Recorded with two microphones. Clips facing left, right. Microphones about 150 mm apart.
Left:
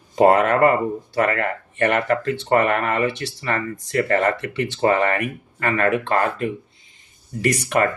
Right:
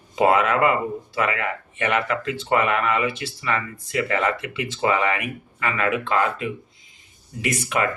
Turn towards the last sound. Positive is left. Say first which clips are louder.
# left 4 dB
turn(degrees=45)  # may be behind; listen again after turning